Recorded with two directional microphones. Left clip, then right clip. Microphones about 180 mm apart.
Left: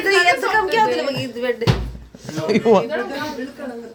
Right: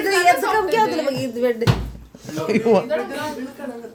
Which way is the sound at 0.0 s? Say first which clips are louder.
Left 1 dB; 35° right (ahead or behind).